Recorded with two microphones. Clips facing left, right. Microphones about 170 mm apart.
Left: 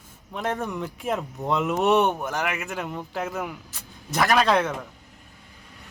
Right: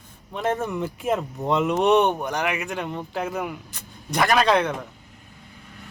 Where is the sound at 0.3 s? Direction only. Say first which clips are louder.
Right 3 dB; centre (ahead or behind).